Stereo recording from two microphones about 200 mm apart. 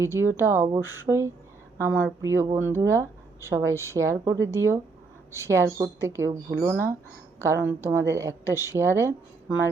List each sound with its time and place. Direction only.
0.0 s speech: 10° right (ahead or behind)
8.7 s speech: 25° right (ahead or behind)